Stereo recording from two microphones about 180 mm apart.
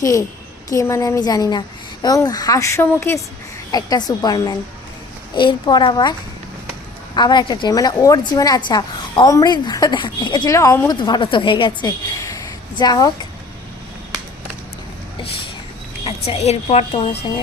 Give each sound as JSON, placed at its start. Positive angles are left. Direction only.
{"t": 0.0, "sound": "a woman's voice", "side_deg": 20}
{"t": 16.0, "sound": "a woman's voice", "side_deg": 35}